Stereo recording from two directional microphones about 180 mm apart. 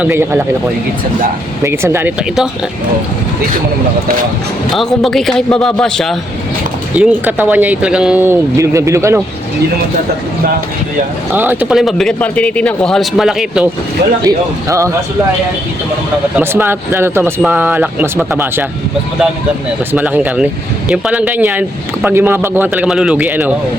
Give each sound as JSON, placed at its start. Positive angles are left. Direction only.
{"t": 0.0, "sound": "speech", "side_deg": -10}
{"t": 1.6, "sound": "speech", "side_deg": -15}
{"t": 4.7, "sound": "speech", "side_deg": 0}
{"t": 6.9, "sound": "speech", "side_deg": -10}
{"t": 11.3, "sound": "speech", "side_deg": -10}
{"t": 14.3, "sound": "speech", "side_deg": -15}
{"t": 16.4, "sound": "speech", "side_deg": -15}
{"t": 19.9, "sound": "speech", "side_deg": -10}